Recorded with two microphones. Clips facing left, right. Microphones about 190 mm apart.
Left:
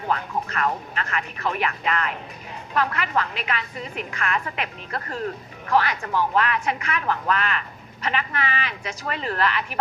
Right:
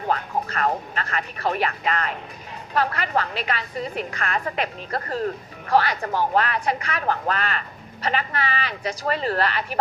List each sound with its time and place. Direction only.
0.1 s a woman's voice: 35° right (ahead or behind)